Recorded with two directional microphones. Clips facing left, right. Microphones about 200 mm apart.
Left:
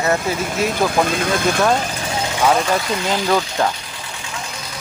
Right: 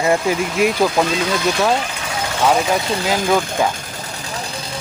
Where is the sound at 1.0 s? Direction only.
50° left (ahead or behind).